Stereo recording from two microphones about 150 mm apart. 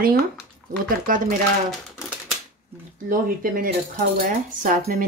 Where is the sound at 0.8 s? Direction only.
70° right (ahead or behind).